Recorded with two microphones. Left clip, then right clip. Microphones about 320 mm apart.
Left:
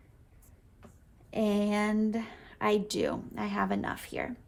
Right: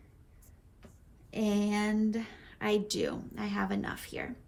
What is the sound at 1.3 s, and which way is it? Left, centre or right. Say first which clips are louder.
A woman's voice: left 3 dB; left.